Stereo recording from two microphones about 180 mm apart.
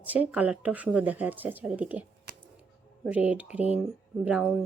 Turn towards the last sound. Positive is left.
turn(degrees=-5)  # may be behind; listen again after turning